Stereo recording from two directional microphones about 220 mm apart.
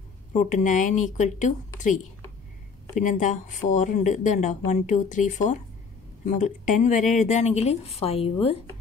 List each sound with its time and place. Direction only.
0.3 s speech: 35° left (ahead or behind)
3.0 s speech: 35° left (ahead or behind)